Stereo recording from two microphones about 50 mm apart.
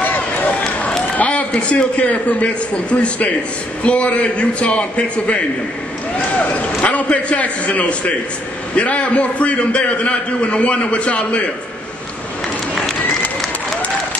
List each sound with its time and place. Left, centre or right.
0.0 s run: left
1.1 s a sound: left
1.5 s a man's voice: left
6.8 s a man's voice: left